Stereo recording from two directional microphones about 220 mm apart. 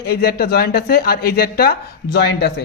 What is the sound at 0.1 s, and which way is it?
A woman's voice, 45° left (ahead or behind).